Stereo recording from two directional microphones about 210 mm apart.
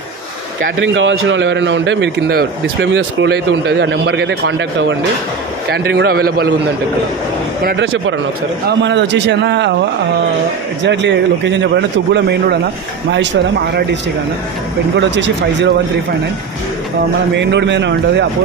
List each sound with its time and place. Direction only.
0.7 s a man's voice: 65° right (ahead or behind)
5.7 s a man's voice: 50° right (ahead or behind)
7.6 s a man's voice: 60° right (ahead or behind)
10.8 s a man's voice: 60° right (ahead or behind)
15.0 s a man's voice: 60° right (ahead or behind)
17.4 s a man's voice: 55° right (ahead or behind)